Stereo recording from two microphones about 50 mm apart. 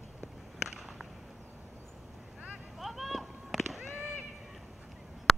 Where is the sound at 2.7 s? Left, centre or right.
Centre.